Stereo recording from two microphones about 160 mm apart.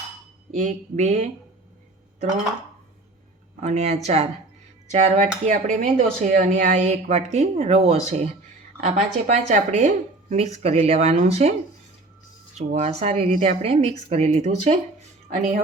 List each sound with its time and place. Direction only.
0.5 s speech: 45° right (ahead or behind)
3.6 s speech: 45° right (ahead or behind)
12.5 s speech: 45° right (ahead or behind)